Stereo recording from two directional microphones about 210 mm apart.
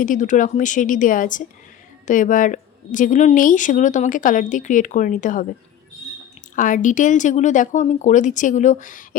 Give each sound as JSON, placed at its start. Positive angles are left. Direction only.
{"t": 0.0, "sound": "a woman's voice", "side_deg": 35}
{"t": 6.6, "sound": "a woman's voice", "side_deg": 40}